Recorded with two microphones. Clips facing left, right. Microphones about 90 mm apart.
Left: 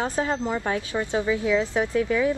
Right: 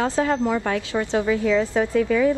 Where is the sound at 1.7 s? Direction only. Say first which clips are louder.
Right 3 dB; 15° left (ahead or behind).